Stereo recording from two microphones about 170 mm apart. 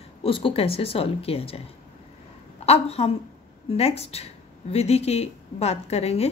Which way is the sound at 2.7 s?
35° left (ahead or behind).